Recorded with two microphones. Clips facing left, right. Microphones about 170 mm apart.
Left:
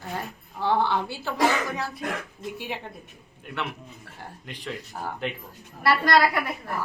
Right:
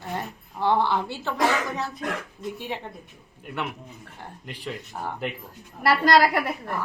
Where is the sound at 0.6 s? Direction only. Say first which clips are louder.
Right 1 dB; centre (ahead or behind).